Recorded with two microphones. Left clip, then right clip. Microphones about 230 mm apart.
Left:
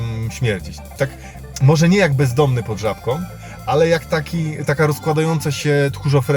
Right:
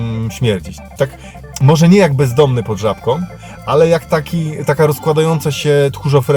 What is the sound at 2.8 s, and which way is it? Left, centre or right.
Speech, centre.